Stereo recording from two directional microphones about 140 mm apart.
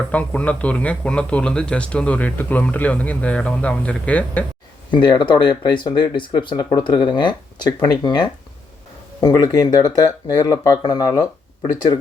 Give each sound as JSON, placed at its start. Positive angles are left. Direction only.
{"t": 0.1, "sound": "speech", "side_deg": 10}
{"t": 4.9, "sound": "speech", "side_deg": 35}